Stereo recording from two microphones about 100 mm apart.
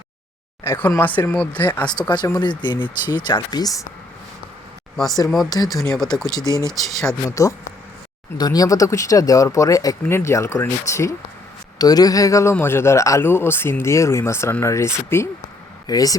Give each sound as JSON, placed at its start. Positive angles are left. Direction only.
{"t": 0.6, "sound": "speech", "side_deg": 20}
{"t": 1.9, "sound": "speech", "side_deg": 45}
{"t": 5.5, "sound": "speech", "side_deg": 35}
{"t": 5.8, "sound": "speech", "side_deg": 5}
{"t": 7.3, "sound": "speech", "side_deg": 35}
{"t": 11.8, "sound": "speech", "side_deg": 40}
{"t": 15.9, "sound": "speech", "side_deg": 40}